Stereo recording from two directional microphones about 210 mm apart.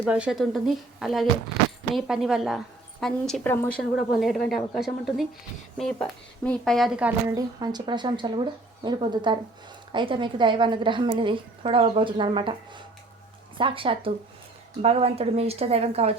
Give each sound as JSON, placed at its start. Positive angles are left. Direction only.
{"t": 0.0, "sound": "a woman's voice", "side_deg": -5}
{"t": 7.3, "sound": "a woman's voice", "side_deg": -20}